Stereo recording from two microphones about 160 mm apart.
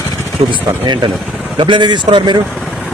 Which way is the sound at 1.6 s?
30° right (ahead or behind).